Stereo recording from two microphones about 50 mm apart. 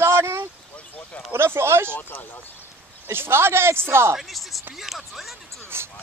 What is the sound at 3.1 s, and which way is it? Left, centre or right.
A woman's voice, right.